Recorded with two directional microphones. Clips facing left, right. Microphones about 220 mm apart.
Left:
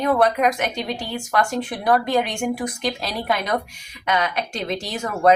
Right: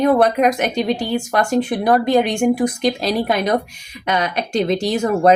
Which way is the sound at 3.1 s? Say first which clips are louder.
Right 5 dB; 40° right (ahead or behind).